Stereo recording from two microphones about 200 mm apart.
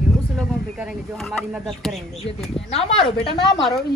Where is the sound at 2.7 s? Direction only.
30° left (ahead or behind).